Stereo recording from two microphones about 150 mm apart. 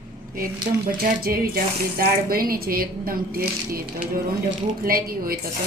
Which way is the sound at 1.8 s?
80° right.